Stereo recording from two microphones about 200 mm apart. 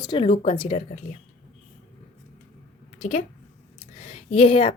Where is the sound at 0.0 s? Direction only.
25° left (ahead or behind).